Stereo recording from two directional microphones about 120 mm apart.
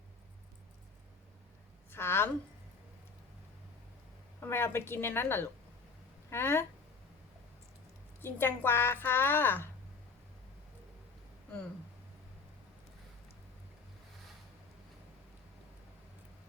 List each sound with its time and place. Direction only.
1.9 s a sound: 20° left (ahead or behind)
4.4 s a woman's voice: 20° left (ahead or behind)
8.2 s a woman's voice: 20° left (ahead or behind)